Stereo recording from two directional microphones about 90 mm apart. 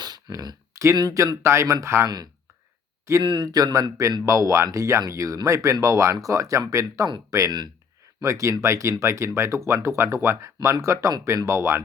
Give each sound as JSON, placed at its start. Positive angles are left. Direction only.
{"t": 0.0, "sound": "speech", "side_deg": -50}
{"t": 2.0, "sound": "speech", "side_deg": -50}